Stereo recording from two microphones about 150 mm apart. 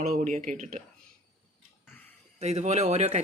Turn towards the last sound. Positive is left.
turn(degrees=-50)  # may be behind; listen again after turning